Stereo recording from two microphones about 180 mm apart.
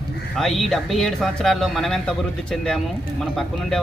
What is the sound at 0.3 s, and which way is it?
Speech, centre (ahead or behind).